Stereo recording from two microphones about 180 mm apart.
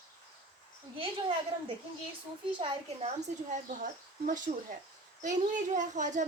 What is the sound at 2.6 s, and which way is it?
Speech, 25° right (ahead or behind).